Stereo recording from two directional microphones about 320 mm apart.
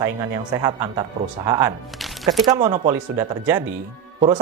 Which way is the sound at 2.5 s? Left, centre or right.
Right.